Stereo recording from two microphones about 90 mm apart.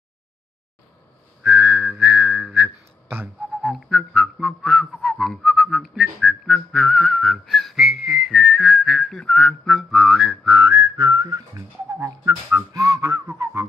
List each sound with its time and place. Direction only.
1.4 s whistling: 25° right (ahead or behind)
3.6 s whistling: centre (ahead or behind)
10.4 s whistling: 25° right (ahead or behind)
10.7 s speech: 40° right (ahead or behind)